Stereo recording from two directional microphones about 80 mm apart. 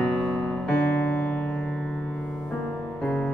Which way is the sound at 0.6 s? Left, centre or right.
Left.